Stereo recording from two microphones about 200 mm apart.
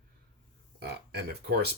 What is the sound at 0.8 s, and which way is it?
Speech, 55° right (ahead or behind).